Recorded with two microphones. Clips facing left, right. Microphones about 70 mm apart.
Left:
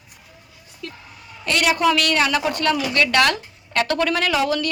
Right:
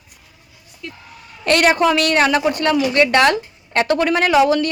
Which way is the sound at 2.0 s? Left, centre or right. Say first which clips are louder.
Right 4 dB; right.